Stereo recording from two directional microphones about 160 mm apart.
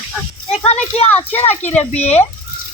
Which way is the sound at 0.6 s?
40° left (ahead or behind).